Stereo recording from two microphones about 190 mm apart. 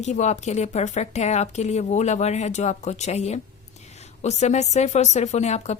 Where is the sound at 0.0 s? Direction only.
35° left (ahead or behind).